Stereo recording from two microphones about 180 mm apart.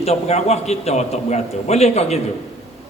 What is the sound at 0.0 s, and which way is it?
A man's voice, 35° left (ahead or behind).